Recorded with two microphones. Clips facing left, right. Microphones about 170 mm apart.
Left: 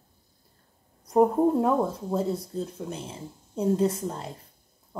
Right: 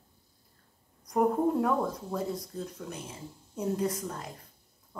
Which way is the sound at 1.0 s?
30° left (ahead or behind).